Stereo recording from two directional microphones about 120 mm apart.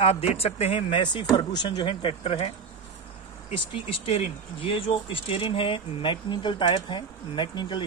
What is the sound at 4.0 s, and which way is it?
Speech, 60° left (ahead or behind).